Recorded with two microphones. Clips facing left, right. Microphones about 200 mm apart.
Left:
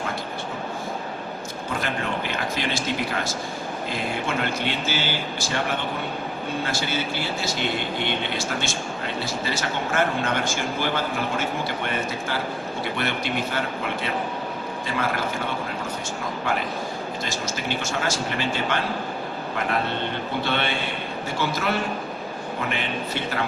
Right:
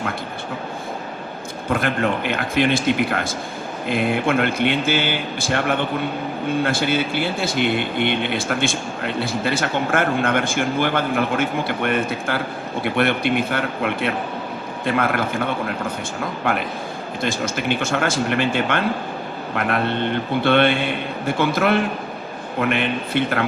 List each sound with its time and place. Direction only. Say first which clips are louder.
1.7 s speech: right 7 dB; 55° right (ahead or behind)